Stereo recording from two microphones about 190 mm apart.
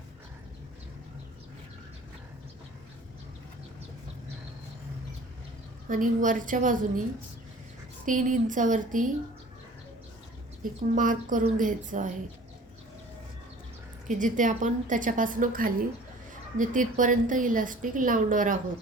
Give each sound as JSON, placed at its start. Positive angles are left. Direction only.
{"t": 5.9, "sound": "a woman's voice", "side_deg": -45}
{"t": 8.0, "sound": "a woman's voice", "side_deg": -45}
{"t": 10.6, "sound": "a woman's voice", "side_deg": -45}
{"t": 14.1, "sound": "a woman's voice", "side_deg": -45}